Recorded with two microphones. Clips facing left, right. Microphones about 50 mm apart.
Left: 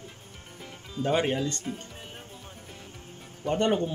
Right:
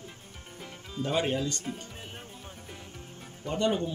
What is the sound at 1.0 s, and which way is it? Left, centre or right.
Speech, left.